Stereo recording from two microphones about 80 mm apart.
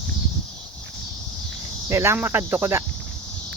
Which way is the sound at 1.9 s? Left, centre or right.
Right.